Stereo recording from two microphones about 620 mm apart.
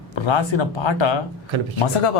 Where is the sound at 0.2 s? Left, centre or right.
Left.